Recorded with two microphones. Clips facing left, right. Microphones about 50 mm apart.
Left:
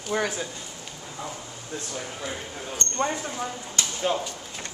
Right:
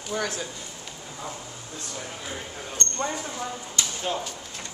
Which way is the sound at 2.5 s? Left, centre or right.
Centre.